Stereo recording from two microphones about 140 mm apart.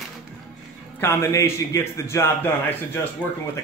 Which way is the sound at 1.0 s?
20° left (ahead or behind).